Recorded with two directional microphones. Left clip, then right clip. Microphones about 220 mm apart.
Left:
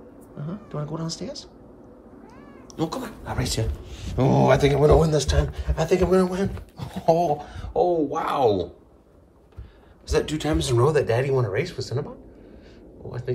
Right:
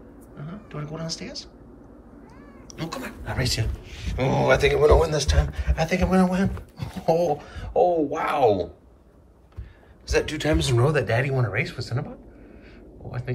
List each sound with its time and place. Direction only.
0.4 s speech: 15° left (ahead or behind)
2.7 s speech: 10° left (ahead or behind)
10.0 s speech: 15° left (ahead or behind)